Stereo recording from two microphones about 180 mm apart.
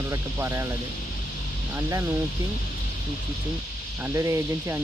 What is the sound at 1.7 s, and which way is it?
Speech, 15° right (ahead or behind).